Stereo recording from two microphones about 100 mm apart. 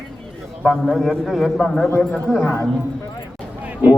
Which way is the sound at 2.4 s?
25° left (ahead or behind).